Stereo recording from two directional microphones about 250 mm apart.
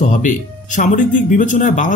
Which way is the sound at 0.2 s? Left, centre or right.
Left.